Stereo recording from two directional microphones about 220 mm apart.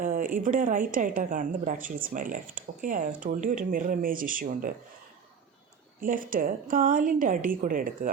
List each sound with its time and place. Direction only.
0.0 s a woman's voice: 40° right (ahead or behind)
6.0 s a woman's voice: 40° right (ahead or behind)